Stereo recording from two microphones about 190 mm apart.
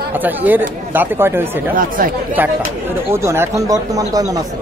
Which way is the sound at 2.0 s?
50° right (ahead or behind).